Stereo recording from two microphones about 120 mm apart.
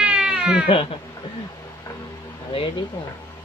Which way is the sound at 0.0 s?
5° right (ahead or behind).